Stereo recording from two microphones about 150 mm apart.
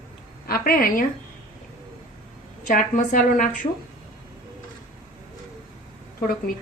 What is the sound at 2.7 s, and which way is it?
Speech, 60° left (ahead or behind).